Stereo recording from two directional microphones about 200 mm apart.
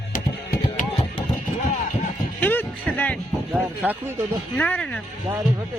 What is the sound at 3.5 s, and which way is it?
Speech, 10° right (ahead or behind).